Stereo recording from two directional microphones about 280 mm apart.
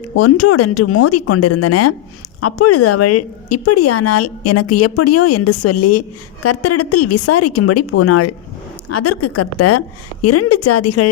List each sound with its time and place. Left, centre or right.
0.2 s speech: left